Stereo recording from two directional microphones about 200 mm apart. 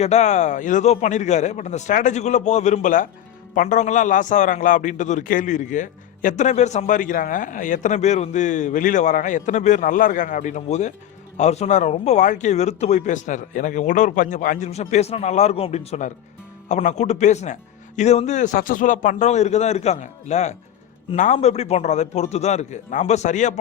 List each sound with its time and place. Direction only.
0.0 s a man's voice: 35° left (ahead or behind)